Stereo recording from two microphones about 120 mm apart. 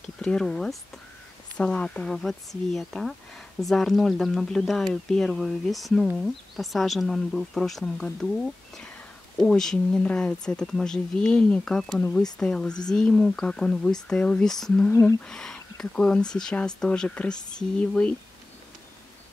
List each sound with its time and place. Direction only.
0.0 s speech: 5° left (ahead or behind)
9.4 s speech: 5° left (ahead or behind)
14.9 s speech: 15° left (ahead or behind)
15.3 s speech: 5° left (ahead or behind)